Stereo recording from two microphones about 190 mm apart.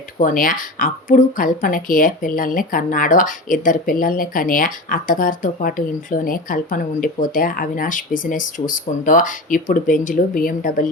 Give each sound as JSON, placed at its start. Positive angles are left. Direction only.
{"t": 0.2, "sound": "speech", "side_deg": 45}